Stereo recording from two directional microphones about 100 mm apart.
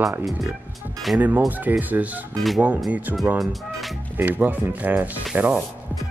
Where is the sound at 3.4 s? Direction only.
Centre (ahead or behind).